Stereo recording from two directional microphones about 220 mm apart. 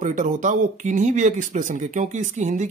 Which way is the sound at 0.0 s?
35° right (ahead or behind).